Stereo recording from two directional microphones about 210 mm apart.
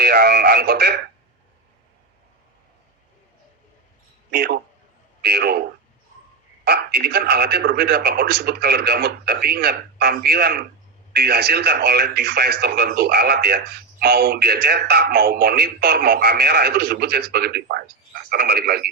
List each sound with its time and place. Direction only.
0.0 s speech: 50° right (ahead or behind)
4.3 s speech: 50° right (ahead or behind)
6.7 s speech: 50° right (ahead or behind)